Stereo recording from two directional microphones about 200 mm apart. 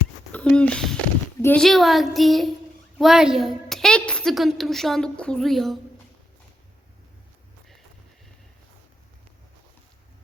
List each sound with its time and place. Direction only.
0.3 s a child's voice: 5° left (ahead or behind)